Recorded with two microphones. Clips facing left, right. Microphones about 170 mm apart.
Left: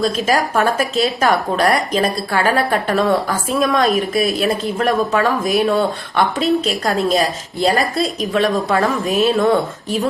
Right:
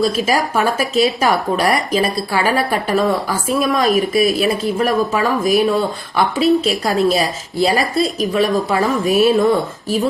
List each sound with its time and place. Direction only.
0.0 s speech: 5° right (ahead or behind)